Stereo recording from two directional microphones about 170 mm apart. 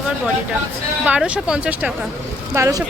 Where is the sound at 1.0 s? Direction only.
5° right (ahead or behind).